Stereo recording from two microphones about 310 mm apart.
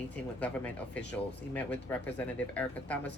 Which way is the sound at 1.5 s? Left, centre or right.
Centre.